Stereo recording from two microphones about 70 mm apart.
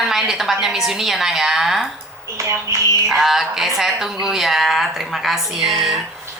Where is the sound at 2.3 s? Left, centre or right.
Right.